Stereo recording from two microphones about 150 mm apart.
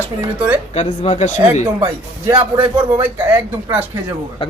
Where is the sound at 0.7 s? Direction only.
45° left (ahead or behind).